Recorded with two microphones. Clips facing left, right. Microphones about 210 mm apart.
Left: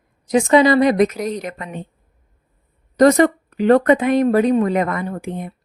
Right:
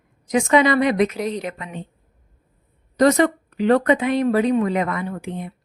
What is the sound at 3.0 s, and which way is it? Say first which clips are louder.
Speech: left 4 dB; 45° left (ahead or behind).